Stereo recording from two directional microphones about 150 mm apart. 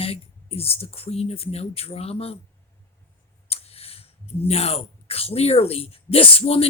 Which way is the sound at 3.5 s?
40° left (ahead or behind).